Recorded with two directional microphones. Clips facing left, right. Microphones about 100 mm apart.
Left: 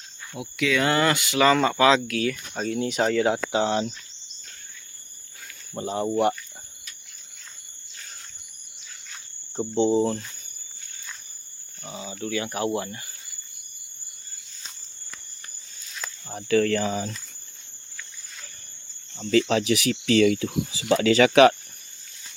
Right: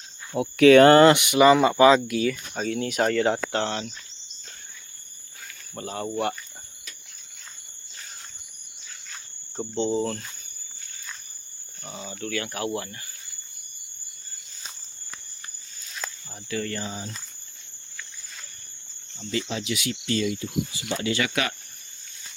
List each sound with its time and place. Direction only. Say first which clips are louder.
0.3 s speech: right 11 dB; 50° right (ahead or behind)
1.0 s speech: right 5 dB; 20° right (ahead or behind); by 3.9 s 20° left (ahead or behind)
5.7 s speech: left 5 dB; 20° left (ahead or behind)
9.7 s speech: left 4 dB; 15° left (ahead or behind)
11.8 s speech: left 2 dB; 5° left (ahead or behind)
16.3 s speech: left 10 dB; 75° left (ahead or behind); by 16.9 s 90° left
19.1 s speech: left 9 dB; 90° left